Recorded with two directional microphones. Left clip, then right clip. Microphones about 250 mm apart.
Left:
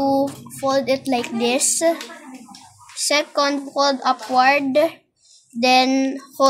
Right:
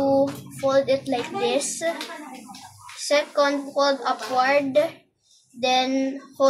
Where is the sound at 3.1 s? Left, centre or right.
Left.